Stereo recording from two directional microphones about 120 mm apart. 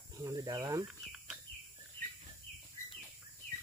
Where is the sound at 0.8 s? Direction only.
Centre (ahead or behind).